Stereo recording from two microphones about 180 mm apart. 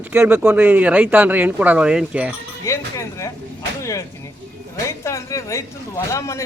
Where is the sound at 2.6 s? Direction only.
15° left (ahead or behind).